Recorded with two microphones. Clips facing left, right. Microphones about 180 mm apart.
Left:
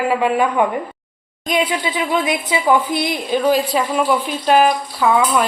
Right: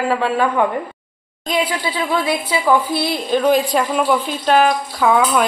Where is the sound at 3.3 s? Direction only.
5° left (ahead or behind).